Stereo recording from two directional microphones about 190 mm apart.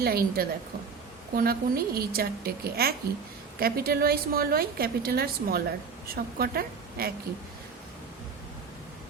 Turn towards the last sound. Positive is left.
turn(degrees=-55)  # may be behind; listen again after turning